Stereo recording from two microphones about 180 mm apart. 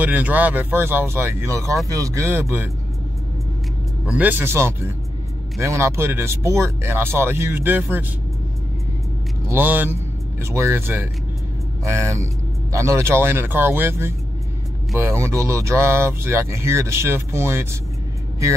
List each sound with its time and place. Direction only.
0.0 s speech: 10° right (ahead or behind)
4.0 s speech: 10° right (ahead or behind)
9.5 s speech: 10° right (ahead or behind)